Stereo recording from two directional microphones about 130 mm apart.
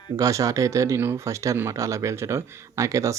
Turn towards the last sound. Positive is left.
turn(degrees=-25)  # may be behind; listen again after turning